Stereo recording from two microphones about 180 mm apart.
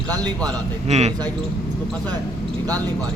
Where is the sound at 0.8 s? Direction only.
35° right (ahead or behind).